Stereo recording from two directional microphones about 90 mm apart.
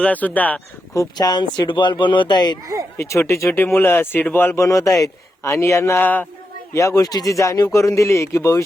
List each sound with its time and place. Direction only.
0.0 s speech: 15° left (ahead or behind)
0.9 s speech: 50° left (ahead or behind)
3.0 s speech: 30° left (ahead or behind)
6.7 s speech: 35° left (ahead or behind)